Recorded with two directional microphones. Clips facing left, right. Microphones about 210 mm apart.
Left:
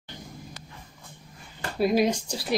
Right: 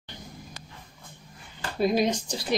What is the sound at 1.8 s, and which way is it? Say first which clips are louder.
Speech: left 1 dB; 5° left (ahead or behind).